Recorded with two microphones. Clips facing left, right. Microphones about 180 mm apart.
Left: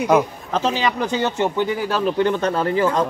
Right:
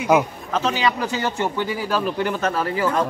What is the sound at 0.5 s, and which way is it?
Speech, 35° left (ahead or behind).